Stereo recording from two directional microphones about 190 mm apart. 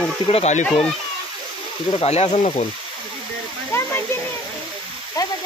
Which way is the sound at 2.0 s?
35° left (ahead or behind).